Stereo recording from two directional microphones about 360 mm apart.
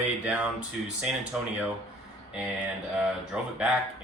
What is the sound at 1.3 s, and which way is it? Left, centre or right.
Speech, centre.